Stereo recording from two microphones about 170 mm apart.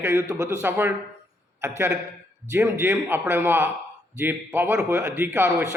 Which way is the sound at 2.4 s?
15° right (ahead or behind).